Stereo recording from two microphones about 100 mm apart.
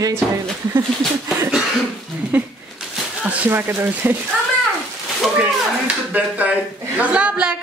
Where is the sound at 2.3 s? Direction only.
15° right (ahead or behind).